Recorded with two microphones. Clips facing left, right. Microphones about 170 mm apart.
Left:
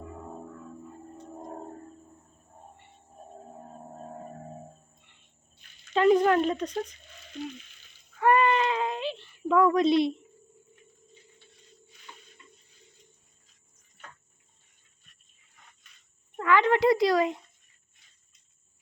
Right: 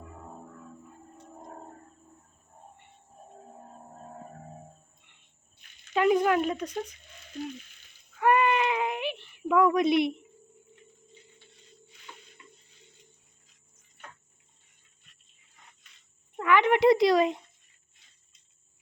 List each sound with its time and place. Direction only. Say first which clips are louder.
5.9 s speech: left 2 dB; 10° right (ahead or behind)
8.2 s a sound: left 1 dB; 15° right (ahead or behind)
16.3 s speech: even; 20° right (ahead or behind)